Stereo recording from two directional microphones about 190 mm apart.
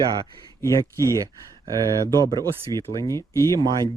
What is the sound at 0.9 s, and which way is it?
Speech, 15° left (ahead or behind).